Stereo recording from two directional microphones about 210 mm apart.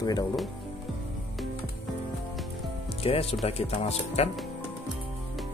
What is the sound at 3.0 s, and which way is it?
Speech, 30° left (ahead or behind).